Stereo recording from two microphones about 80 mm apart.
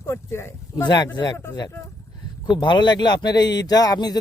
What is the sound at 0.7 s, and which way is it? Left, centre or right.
Speech, left.